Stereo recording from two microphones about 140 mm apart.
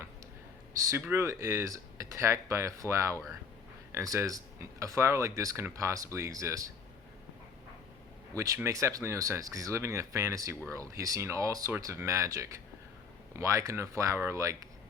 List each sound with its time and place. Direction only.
0.8 s speech: 20° right (ahead or behind)
8.3 s speech: 20° right (ahead or behind)